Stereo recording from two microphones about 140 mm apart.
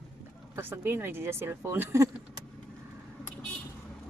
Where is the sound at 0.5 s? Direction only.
15° right (ahead or behind).